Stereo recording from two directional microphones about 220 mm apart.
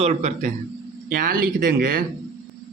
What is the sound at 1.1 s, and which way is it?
Speech, 40° right (ahead or behind).